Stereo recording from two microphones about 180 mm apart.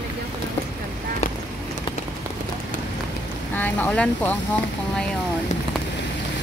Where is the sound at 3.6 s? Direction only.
5° left (ahead or behind).